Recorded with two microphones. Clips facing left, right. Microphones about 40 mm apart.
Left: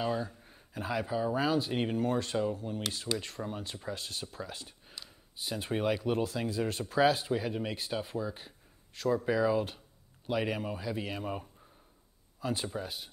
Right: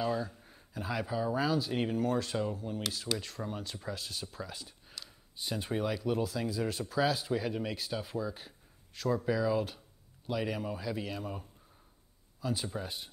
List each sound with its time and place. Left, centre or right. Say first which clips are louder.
0.0 s speech: even; centre
0.4 s a sound: left 1 dB; centre
0.7 s speech: left 2 dB; centre
2.3 s speech: left 2 dB; centre
3.2 s speech: left 1 dB; centre
4.8 s a sound: even; centre
5.8 s speech: left 3 dB; left
8.4 s a sound: even; centre
9.2 s speech: left 2 dB; centre
12.7 s speech: left 1 dB; centre